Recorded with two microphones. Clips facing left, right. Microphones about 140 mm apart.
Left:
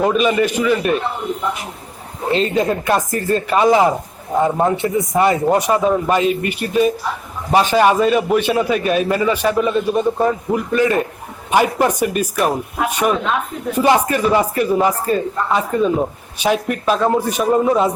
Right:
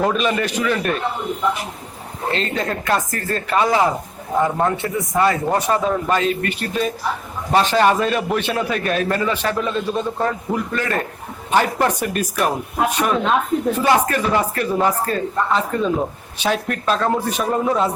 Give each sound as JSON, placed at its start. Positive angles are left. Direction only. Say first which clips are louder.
{"t": 0.0, "sound": "a man's voice", "louder": "left 4 dB", "side_deg": 5}
{"t": 2.3, "sound": "speech", "louder": "left 7 dB", "side_deg": 15}